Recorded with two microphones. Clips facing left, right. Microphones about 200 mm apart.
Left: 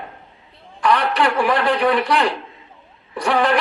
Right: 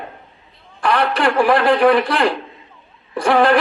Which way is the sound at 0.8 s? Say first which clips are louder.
Right 1 dB; 45° right (ahead or behind).